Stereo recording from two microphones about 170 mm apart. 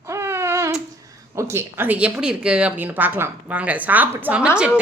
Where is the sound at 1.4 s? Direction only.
15° right (ahead or behind).